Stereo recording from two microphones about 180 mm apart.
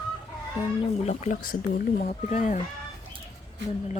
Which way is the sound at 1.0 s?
40° left (ahead or behind).